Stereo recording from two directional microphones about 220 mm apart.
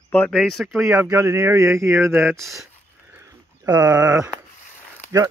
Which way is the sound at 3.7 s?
15° right (ahead or behind).